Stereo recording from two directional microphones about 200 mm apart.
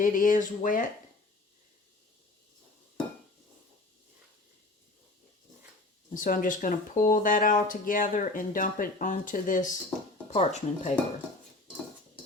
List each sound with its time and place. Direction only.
0.0 s speech: 40° left (ahead or behind)
6.1 s speech: 40° left (ahead or behind)